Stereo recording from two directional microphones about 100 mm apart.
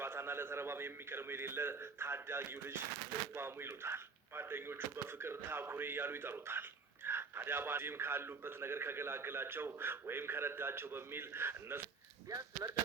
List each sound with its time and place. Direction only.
0.0 s speech: 25° right (ahead or behind)
12.3 s speech: 35° right (ahead or behind)